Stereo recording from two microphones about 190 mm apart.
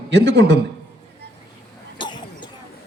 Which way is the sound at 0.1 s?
65° right (ahead or behind).